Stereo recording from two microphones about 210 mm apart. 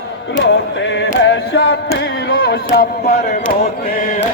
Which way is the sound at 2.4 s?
45° left (ahead or behind).